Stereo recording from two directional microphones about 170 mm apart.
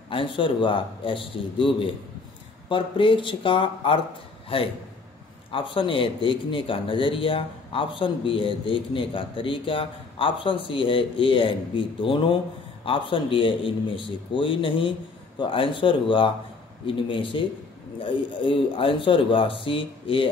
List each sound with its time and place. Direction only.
0.1 s a man's voice: 30° left (ahead or behind)